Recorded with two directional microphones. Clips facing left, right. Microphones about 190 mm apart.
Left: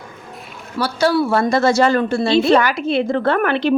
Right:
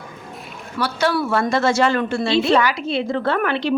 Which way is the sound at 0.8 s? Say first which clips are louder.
Left 4 dB; 35° left (ahead or behind).